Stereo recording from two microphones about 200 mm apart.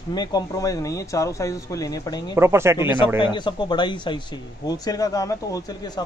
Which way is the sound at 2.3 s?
15° right (ahead or behind).